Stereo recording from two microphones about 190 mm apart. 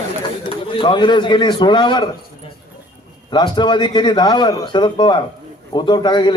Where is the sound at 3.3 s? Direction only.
25° left (ahead or behind).